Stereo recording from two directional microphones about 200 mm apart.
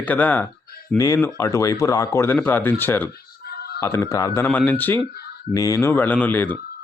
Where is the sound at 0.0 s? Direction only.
10° left (ahead or behind).